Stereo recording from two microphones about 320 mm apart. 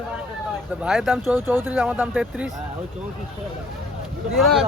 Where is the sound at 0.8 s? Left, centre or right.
Centre.